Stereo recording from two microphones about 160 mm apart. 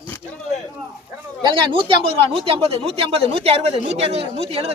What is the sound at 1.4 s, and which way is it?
Speech, 30° right (ahead or behind).